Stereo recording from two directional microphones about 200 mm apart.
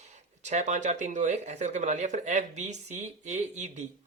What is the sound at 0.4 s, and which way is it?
Speech, 35° right (ahead or behind).